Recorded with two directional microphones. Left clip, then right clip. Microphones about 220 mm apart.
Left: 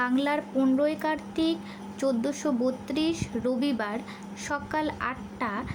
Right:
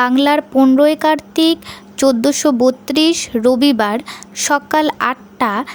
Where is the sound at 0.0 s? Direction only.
45° right (ahead or behind).